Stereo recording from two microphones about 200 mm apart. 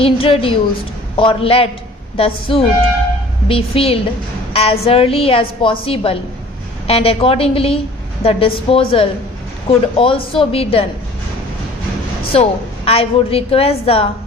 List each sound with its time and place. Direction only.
0.0 s a woman's voice: 25° left (ahead or behind)
12.3 s a woman's voice: 30° left (ahead or behind)